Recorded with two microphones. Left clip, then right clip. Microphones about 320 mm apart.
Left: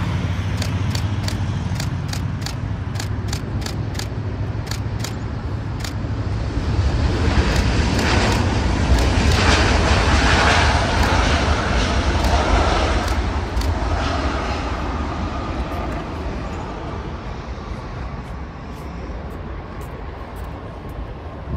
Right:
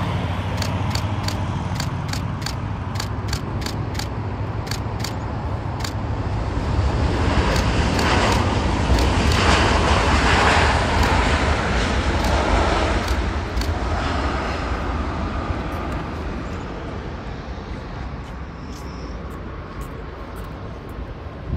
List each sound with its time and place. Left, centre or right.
0.0 s vehicle: right
6.6 s vehicle: centre